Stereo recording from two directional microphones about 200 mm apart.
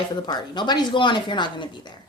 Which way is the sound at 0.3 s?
20° left (ahead or behind).